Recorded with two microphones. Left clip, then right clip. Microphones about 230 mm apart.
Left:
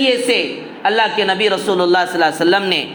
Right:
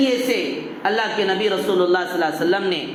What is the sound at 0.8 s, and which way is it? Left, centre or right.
A man's voice, left.